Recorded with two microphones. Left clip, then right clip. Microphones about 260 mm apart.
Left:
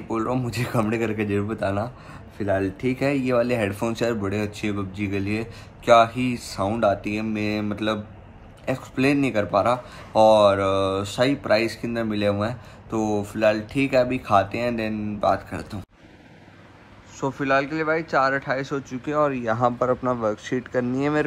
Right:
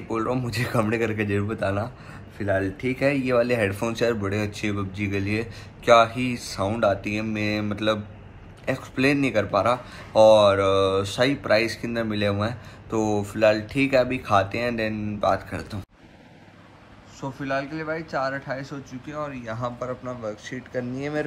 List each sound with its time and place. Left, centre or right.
0.1 s speech: centre
17.2 s a man's voice: centre